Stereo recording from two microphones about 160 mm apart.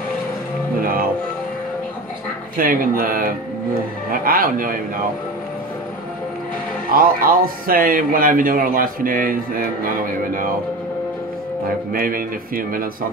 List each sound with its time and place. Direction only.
0.7 s music: 65° right (ahead or behind)
2.5 s speech: 60° right (ahead or behind)
6.9 s speech: 65° right (ahead or behind)
11.9 s speech: 65° right (ahead or behind)